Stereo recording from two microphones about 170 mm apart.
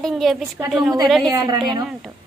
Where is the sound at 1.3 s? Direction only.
20° right (ahead or behind).